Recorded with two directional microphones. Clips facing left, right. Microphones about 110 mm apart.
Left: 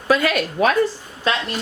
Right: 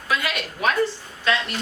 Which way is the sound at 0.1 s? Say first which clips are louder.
Left 8 dB; 45° left (ahead or behind).